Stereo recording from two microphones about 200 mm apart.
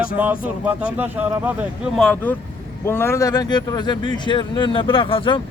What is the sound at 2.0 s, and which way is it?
Speech, 5° left (ahead or behind).